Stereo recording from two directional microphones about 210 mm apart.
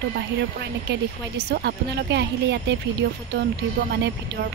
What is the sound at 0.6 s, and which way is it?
Speech, 50° right (ahead or behind).